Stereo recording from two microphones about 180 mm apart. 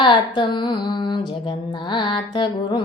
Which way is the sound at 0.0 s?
25° left (ahead or behind).